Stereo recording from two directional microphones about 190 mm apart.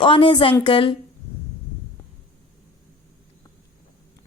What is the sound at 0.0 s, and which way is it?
Speech, 25° left (ahead or behind).